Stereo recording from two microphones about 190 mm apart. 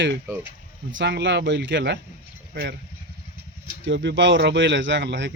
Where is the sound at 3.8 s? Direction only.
65° right (ahead or behind).